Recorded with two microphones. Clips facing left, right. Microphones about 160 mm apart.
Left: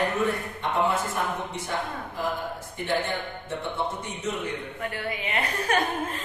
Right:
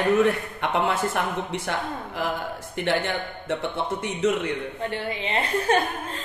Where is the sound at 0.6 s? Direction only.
75° right (ahead or behind).